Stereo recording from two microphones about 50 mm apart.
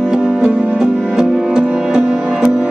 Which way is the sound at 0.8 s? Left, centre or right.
Centre.